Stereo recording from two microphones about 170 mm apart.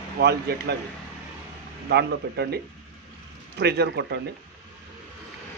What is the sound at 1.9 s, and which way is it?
Speech, 75° right (ahead or behind).